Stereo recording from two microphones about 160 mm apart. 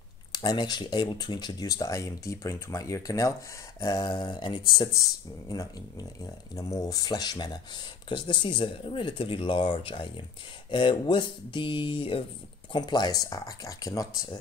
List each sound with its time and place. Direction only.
0.3 s speech: 25° left (ahead or behind)